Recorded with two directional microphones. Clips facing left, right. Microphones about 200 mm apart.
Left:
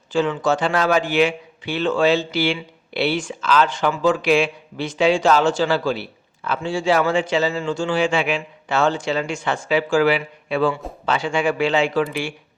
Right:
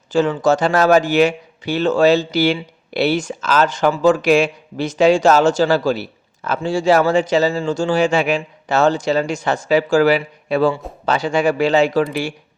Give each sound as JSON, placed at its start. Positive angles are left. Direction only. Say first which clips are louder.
{"t": 0.1, "sound": "speech", "louder": "right 4 dB", "side_deg": -45}